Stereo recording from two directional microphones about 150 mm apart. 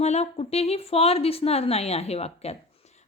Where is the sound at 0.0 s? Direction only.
45° left (ahead or behind).